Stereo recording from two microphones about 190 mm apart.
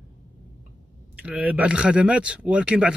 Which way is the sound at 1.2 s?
5° right (ahead or behind).